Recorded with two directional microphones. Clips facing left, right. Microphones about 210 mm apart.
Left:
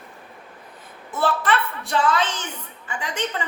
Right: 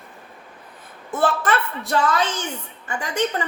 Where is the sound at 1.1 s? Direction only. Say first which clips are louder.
Right 1 dB; 50° right (ahead or behind).